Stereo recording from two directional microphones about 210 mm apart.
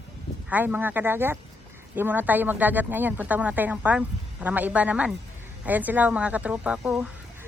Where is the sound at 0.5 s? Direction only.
10° right (ahead or behind).